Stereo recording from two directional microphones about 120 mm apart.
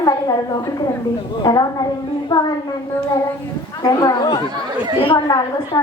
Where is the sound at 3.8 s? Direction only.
35° left (ahead or behind).